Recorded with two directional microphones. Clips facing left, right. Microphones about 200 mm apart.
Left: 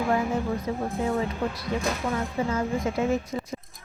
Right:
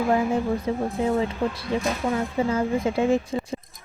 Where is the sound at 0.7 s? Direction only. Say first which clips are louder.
Right 4 dB; 30° right (ahead or behind).